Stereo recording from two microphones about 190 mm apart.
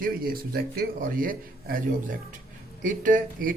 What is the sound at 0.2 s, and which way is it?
Speech, 50° right (ahead or behind).